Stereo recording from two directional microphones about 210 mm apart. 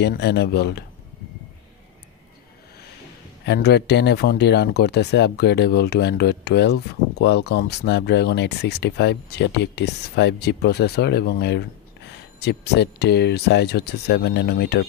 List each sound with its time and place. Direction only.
0.0 s speech: 55° left (ahead or behind)
3.4 s speech: 50° left (ahead or behind)